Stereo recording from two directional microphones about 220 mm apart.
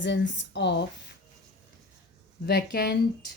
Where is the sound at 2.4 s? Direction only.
50° left (ahead or behind).